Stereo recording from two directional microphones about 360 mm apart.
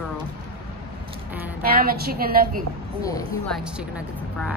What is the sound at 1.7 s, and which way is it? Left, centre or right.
Speech, right.